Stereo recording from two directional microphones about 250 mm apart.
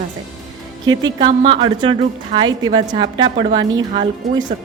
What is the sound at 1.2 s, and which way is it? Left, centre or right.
A woman's voice, centre.